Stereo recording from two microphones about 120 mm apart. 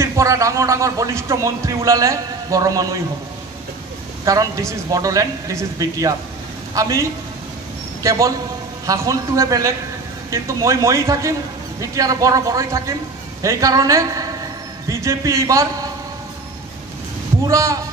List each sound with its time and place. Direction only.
0.0 s speech: 25° right (ahead or behind)
4.2 s a man's voice: 25° right (ahead or behind)
17.5 s speech: 25° right (ahead or behind)